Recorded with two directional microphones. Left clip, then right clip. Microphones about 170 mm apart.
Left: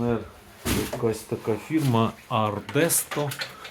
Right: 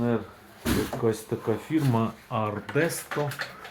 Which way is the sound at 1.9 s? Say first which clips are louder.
Left 4 dB; 40° left (ahead or behind).